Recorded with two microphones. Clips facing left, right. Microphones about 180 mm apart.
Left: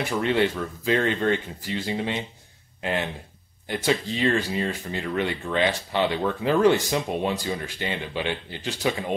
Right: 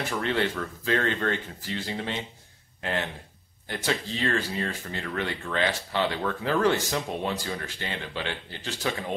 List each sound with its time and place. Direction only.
0.0 s speech: 15° left (ahead or behind)
3.6 s speech: 15° left (ahead or behind)